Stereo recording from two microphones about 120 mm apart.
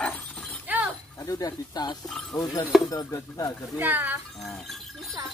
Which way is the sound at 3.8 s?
15° right (ahead or behind).